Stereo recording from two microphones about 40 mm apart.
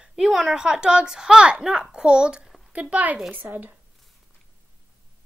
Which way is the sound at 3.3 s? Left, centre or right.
Right.